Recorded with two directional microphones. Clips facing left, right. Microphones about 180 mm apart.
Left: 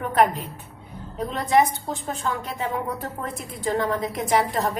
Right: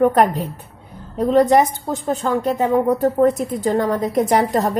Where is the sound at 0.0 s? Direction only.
45° right (ahead or behind).